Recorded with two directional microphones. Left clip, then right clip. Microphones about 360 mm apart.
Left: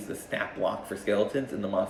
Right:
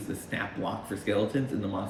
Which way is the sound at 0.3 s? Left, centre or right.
Centre.